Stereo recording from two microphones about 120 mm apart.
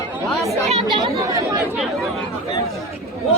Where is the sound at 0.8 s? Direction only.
35° right (ahead or behind).